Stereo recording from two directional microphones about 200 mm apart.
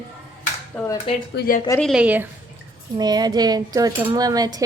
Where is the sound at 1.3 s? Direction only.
55° left (ahead or behind).